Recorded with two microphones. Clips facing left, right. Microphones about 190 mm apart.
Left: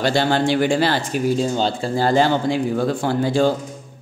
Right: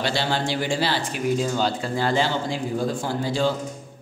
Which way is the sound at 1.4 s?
35° left (ahead or behind).